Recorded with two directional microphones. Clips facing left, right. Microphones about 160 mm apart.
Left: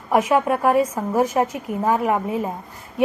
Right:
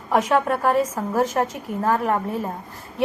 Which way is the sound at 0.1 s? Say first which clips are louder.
Left 2 dB; 10° left (ahead or behind).